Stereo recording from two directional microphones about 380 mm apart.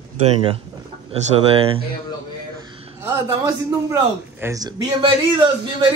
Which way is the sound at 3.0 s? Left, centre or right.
Centre.